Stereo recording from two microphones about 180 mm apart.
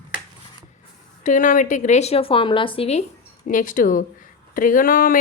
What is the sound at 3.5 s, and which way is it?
Speech, 45° left (ahead or behind).